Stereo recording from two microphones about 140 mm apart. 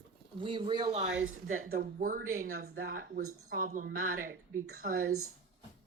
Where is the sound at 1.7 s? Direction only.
75° right (ahead or behind).